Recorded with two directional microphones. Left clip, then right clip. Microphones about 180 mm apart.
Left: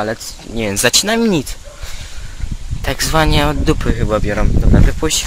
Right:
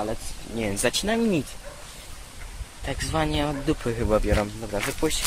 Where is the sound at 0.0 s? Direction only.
40° left (ahead or behind).